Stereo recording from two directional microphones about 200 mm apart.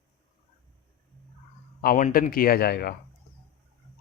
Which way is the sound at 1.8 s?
45° left (ahead or behind).